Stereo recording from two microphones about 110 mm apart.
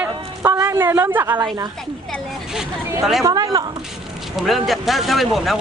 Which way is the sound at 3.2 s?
30° right (ahead or behind).